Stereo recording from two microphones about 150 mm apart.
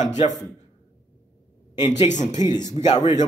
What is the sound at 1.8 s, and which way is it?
Speech, 50° left (ahead or behind).